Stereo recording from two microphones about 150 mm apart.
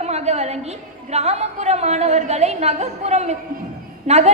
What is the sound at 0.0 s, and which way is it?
A woman's voice, 45° right (ahead or behind).